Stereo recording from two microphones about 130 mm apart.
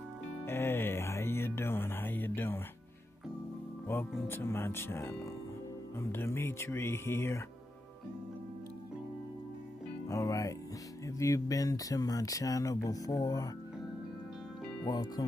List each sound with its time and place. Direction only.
0.5 s music: 15° left (ahead or behind)
4.3 s speech: 20° left (ahead or behind)
10.0 s speech: 25° left (ahead or behind)
14.9 s speech: 30° left (ahead or behind)